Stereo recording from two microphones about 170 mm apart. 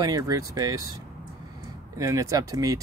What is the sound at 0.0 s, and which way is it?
Speech, 20° right (ahead or behind).